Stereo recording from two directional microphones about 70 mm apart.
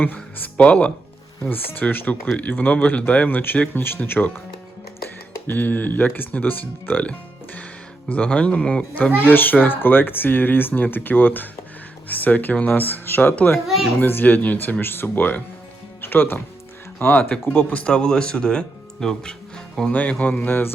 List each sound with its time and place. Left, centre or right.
0.0 s speech: left
5.5 s speech: left
13.7 s a child's voice: centre
14.0 s speech: left
16.0 s music: left
17.0 s speech: left; by 19.9 s centre
19.9 s speech: centre